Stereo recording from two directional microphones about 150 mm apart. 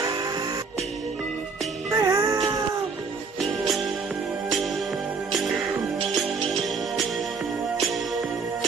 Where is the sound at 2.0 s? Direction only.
25° right (ahead or behind).